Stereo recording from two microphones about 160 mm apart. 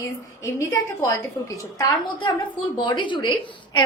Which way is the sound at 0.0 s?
20° left (ahead or behind).